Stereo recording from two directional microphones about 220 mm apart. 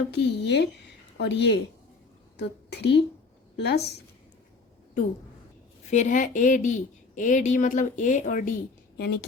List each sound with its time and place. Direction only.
0.1 s a woman's voice: 50° left (ahead or behind)
5.9 s a woman's voice: 35° left (ahead or behind)